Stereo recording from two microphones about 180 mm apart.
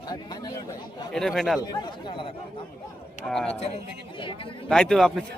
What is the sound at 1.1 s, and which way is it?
Speech, centre (ahead or behind).